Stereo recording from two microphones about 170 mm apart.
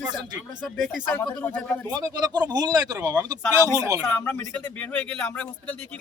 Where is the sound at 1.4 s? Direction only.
5° left (ahead or behind).